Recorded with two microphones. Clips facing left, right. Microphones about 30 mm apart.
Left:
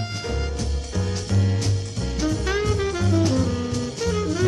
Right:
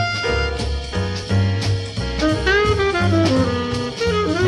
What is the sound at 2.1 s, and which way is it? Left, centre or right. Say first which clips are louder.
Saxophone: right 7 dB; right.